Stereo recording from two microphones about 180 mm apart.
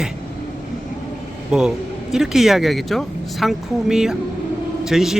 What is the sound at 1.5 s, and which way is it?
Speech, 5° right (ahead or behind).